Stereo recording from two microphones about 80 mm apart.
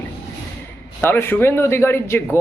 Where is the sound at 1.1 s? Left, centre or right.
Left.